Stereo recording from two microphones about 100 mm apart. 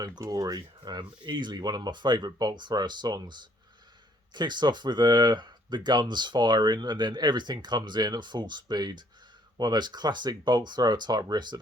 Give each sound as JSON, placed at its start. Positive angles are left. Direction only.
{"t": 0.0, "sound": "speech", "side_deg": -35}